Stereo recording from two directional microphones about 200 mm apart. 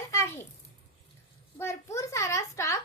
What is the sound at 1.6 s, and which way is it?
A woman's voice, 15° left (ahead or behind).